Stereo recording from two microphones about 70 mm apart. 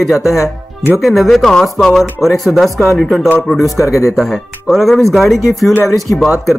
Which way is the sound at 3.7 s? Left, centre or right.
Left.